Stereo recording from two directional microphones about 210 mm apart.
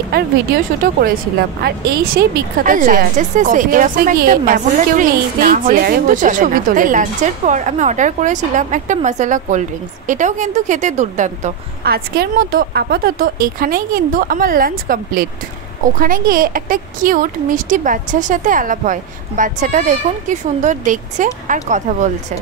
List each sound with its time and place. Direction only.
0.8 s speech: 40° right (ahead or behind)